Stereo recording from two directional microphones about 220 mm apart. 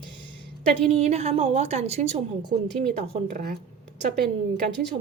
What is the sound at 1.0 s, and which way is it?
A woman's voice, 30° right (ahead or behind).